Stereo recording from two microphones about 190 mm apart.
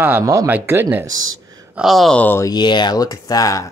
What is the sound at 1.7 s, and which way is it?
Speech, centre (ahead or behind).